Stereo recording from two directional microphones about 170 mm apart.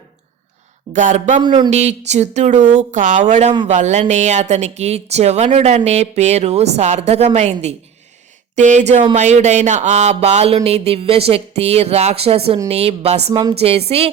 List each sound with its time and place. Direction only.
0.9 s speech: 45° right (ahead or behind)